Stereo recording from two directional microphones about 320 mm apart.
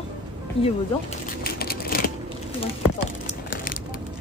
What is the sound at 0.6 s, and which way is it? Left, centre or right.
Speech, centre.